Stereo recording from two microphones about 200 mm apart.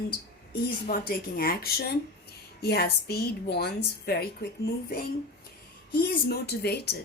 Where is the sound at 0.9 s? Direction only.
45° left (ahead or behind).